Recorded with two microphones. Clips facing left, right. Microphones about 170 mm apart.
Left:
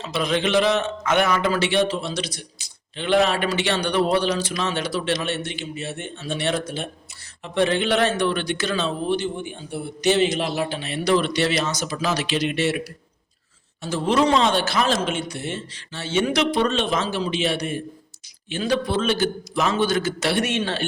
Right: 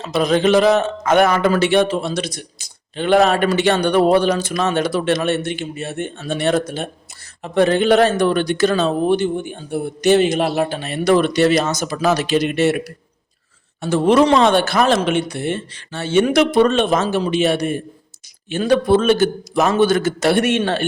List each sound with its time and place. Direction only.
0.0 s speech: 45° right (ahead or behind)
13.8 s speech: 60° right (ahead or behind)